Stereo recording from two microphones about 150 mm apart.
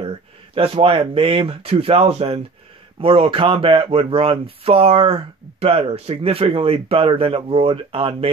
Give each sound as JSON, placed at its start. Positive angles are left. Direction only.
{"t": 0.6, "sound": "speech", "side_deg": -35}